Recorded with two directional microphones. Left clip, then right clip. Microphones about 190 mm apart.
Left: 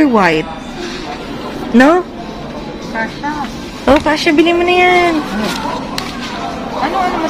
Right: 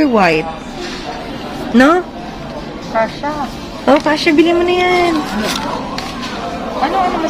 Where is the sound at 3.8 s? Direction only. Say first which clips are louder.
Left 1 dB; 10° left (ahead or behind); by 5.1 s 25° left (ahead or behind).